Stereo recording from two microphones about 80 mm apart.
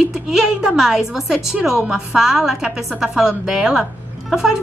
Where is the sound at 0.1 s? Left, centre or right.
Centre.